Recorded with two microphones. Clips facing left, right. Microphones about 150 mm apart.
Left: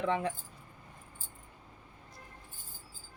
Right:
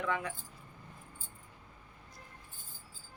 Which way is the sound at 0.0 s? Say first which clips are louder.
Left 4 dB; 30° left (ahead or behind).